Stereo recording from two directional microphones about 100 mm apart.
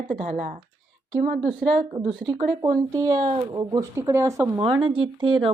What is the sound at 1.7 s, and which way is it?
Speech, 55° right (ahead or behind).